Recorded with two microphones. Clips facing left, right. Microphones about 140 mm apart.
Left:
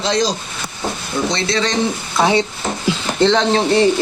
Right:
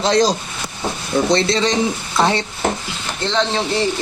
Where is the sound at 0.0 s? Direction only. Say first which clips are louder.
Right 3 dB; 45° right (ahead or behind).